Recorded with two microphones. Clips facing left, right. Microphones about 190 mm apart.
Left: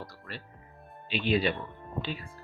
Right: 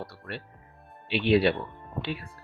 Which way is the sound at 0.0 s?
65° right (ahead or behind).